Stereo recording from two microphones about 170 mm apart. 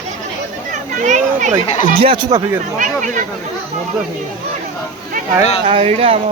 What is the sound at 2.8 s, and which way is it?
Speech, 50° right (ahead or behind).